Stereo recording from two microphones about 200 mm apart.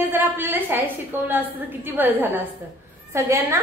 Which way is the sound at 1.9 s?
10° right (ahead or behind).